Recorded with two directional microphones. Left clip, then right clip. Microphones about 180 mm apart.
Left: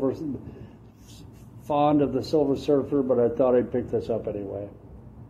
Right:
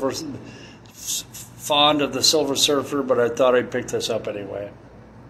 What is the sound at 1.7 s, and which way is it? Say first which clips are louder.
A man's voice: right 4 dB; 25° left (ahead or behind).